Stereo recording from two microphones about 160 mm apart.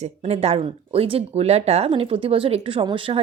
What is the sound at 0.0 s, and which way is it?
A woman's voice, 40° right (ahead or behind).